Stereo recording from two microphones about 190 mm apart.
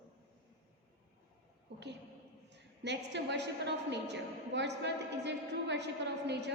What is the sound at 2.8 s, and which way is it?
A woman's voice, 65° right (ahead or behind).